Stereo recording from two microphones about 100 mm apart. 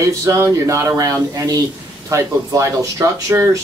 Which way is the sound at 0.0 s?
30° right (ahead or behind).